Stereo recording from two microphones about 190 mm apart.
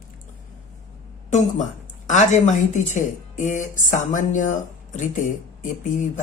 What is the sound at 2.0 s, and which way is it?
Speech, 40° left (ahead or behind).